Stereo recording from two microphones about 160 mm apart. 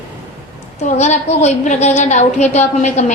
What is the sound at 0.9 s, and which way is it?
A woman's voice, 45° left (ahead or behind).